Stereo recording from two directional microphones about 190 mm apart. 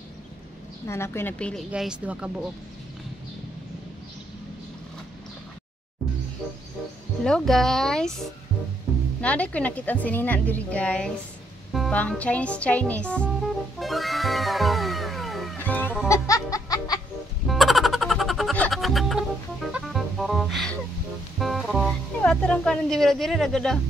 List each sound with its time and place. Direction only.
0.8 s speech: 15° left (ahead or behind); by 2.4 s 5° right (ahead or behind)
7.2 s speech: 5° left (ahead or behind)
9.2 s a woman's voice: 5° left (ahead or behind)
13.7 s music: centre (ahead or behind); by 17.0 s 20° left (ahead or behind)
17.5 s music: centre (ahead or behind)